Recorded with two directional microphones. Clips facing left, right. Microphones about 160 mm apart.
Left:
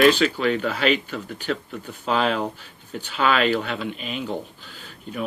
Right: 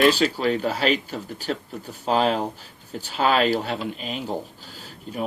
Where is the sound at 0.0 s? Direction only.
35° right (ahead or behind).